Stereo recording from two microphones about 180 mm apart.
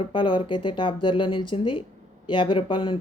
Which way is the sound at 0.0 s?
25° left (ahead or behind).